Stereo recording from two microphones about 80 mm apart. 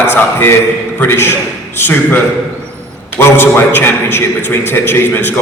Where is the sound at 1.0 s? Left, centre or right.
Left.